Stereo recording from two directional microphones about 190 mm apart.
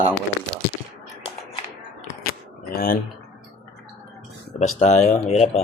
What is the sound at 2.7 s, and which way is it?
Speech, 55° left (ahead or behind).